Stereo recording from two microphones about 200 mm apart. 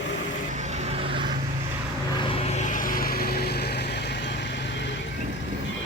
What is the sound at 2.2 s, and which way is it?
Vehicle, 30° left (ahead or behind).